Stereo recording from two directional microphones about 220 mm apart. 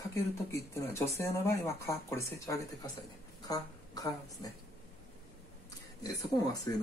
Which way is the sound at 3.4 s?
15° left (ahead or behind).